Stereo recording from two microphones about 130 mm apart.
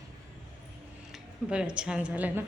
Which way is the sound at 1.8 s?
10° right (ahead or behind).